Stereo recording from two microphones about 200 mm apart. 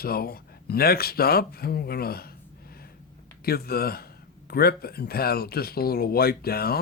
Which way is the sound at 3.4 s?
50° left (ahead or behind).